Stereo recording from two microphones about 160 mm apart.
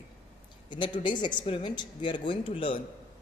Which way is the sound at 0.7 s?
30° left (ahead or behind).